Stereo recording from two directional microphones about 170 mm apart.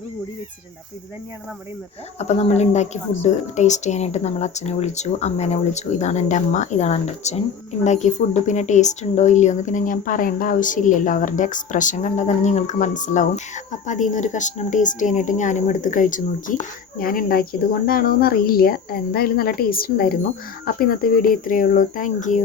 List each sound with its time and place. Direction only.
2.1 s a woman's voice: 40° left (ahead or behind)